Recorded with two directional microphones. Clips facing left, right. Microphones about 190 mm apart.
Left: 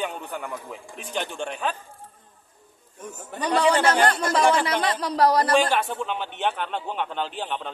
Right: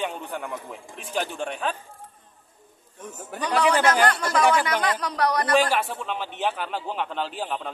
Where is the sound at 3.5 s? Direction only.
30° left (ahead or behind).